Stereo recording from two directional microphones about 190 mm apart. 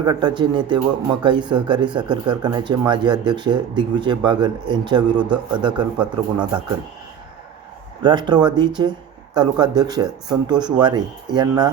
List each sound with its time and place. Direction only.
0.0 s speech: 20° right (ahead or behind)
8.0 s speech: 20° right (ahead or behind)